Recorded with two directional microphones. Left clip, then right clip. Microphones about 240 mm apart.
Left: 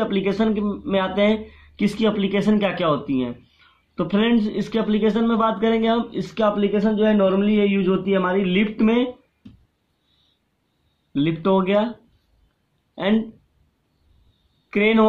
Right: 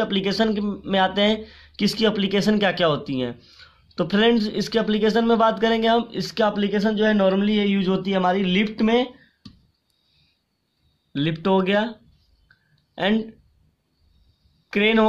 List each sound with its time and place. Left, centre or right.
0.0 s speech: right
11.1 s speech: right
14.7 s speech: right